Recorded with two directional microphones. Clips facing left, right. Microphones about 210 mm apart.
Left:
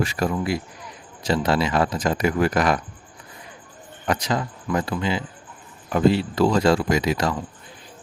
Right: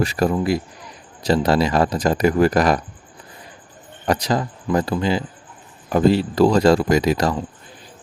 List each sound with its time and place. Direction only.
0.0 s speech: 35° right (ahead or behind)
4.0 s speech: 35° right (ahead or behind)